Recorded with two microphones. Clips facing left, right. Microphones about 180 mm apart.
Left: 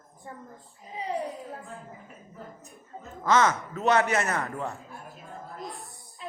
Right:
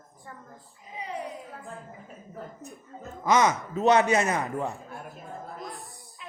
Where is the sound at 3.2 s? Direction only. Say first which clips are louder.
Right 1 dB; 15° right (ahead or behind).